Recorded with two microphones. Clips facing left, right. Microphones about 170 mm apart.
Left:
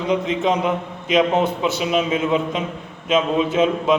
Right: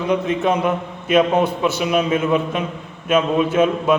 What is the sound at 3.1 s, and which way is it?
Speech, 20° left (ahead or behind).